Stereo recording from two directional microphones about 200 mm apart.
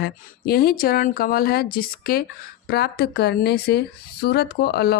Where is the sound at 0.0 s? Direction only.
50° left (ahead or behind).